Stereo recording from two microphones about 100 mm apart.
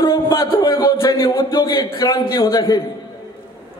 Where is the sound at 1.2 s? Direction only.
55° left (ahead or behind); by 2.8 s 40° left (ahead or behind).